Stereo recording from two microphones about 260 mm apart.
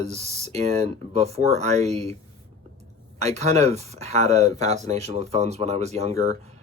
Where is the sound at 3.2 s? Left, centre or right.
Right.